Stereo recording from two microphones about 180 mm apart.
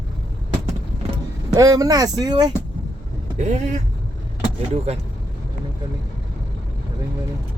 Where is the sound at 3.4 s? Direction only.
40° right (ahead or behind).